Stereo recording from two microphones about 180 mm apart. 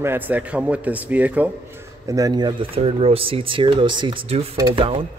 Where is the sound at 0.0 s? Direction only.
10° right (ahead or behind).